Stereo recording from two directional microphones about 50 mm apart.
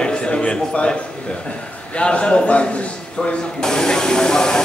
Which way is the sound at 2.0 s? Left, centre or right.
Left.